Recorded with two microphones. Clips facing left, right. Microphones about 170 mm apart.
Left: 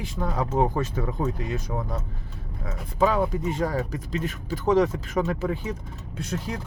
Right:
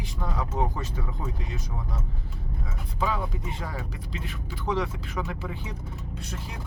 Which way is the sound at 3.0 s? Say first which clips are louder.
Left 8 dB; 45° left (ahead or behind).